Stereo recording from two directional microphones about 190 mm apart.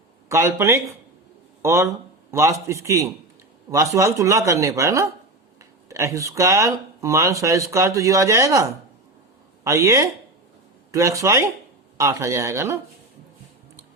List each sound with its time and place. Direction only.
0.3 s speech: 15° right (ahead or behind)